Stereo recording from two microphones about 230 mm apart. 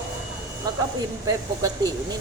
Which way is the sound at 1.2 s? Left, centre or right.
Centre.